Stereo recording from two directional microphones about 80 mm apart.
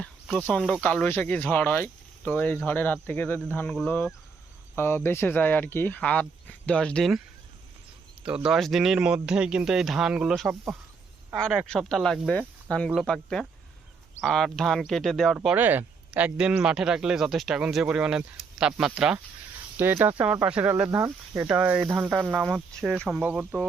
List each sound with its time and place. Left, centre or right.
0.8 s speech: centre
8.3 s speech: centre
8.5 s speech: centre
11.6 s speech: centre
12.3 s speech: centre
15.4 s speech: right
19.7 s speech: right
20.9 s speech: right
21.4 s speech: right